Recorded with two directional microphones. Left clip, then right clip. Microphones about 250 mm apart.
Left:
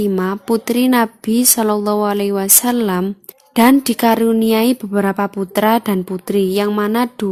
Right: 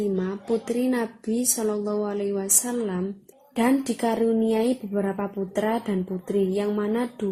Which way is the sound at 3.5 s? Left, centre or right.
Left.